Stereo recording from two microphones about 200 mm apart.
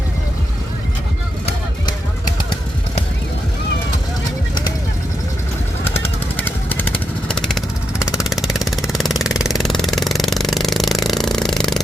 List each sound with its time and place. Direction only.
5.8 s vehicle: 10° left (ahead or behind)